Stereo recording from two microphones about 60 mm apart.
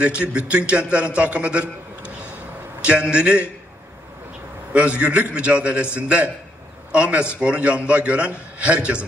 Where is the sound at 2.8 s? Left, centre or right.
Centre.